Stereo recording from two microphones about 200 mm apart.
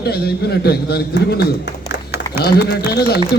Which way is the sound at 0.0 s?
55° left (ahead or behind).